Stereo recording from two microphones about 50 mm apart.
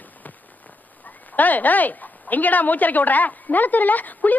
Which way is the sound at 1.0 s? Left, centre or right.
Left.